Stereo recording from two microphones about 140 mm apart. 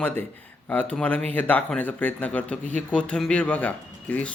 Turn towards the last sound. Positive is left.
turn(degrees=10)  # may be behind; listen again after turning